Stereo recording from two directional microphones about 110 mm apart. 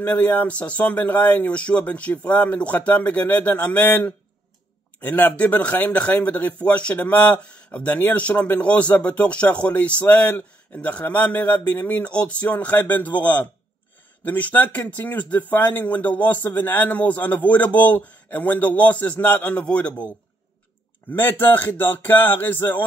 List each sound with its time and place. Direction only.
0.0 s speech: 15° left (ahead or behind)
21.1 s speech: 20° left (ahead or behind)